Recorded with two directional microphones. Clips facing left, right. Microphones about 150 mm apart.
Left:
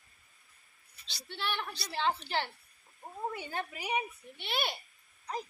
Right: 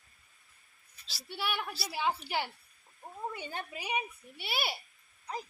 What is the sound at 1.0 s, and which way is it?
A woman's voice, 5° right (ahead or behind).